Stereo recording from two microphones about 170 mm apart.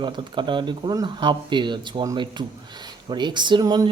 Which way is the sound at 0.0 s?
25° right (ahead or behind).